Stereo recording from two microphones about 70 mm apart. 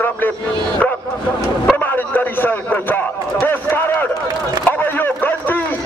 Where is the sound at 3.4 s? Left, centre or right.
Left.